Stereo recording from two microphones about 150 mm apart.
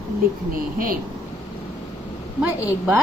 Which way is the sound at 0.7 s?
70° right (ahead or behind).